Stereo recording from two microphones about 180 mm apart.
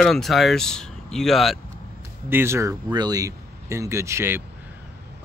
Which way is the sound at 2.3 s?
15° right (ahead or behind).